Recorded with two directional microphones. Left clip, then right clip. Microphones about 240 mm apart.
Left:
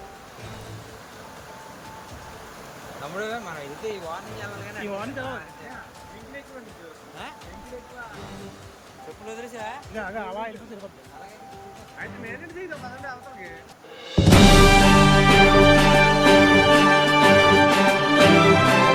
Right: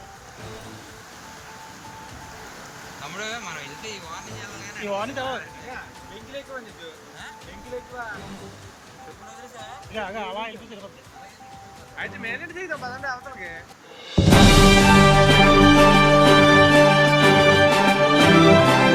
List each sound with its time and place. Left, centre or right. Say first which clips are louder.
3.2 s speech: left 1 dB; left
4.9 s speech: right 6 dB; centre
9.9 s speech: right 4 dB; centre
11.9 s speech: right 6 dB; centre
14.1 s music: even; centre